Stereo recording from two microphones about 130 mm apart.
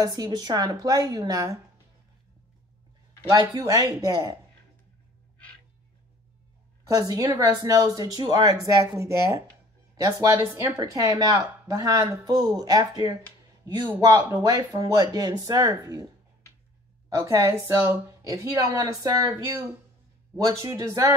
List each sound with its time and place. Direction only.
0.0 s speech: 30° right (ahead or behind)
3.3 s speech: 30° right (ahead or behind)
7.0 s speech: 25° right (ahead or behind)
14.5 s speech: 30° right (ahead or behind)
17.1 s speech: 20° right (ahead or behind)